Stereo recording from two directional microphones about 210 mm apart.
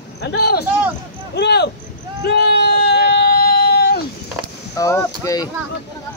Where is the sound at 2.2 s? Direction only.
50° left (ahead or behind).